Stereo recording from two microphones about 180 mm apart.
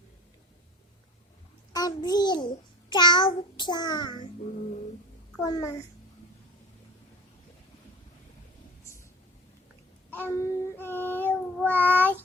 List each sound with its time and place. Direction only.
1.7 s a child's voice: 20° left (ahead or behind)
2.9 s child singing: 25° left (ahead or behind)
5.4 s child singing: 20° left (ahead or behind)
10.1 s child singing: 10° left (ahead or behind)